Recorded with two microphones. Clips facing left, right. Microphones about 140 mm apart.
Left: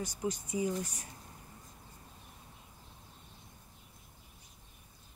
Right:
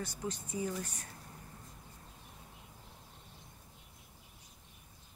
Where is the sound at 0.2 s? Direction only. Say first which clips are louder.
Left 5 dB; 15° left (ahead or behind).